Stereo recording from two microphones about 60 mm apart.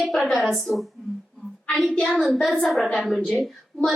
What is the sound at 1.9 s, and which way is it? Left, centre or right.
Speech, centre.